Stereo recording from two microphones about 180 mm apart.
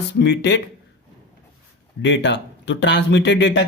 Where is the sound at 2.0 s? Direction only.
80° left.